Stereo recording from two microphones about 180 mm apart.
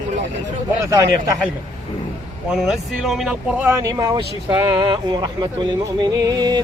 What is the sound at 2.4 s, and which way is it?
Speech, centre (ahead or behind).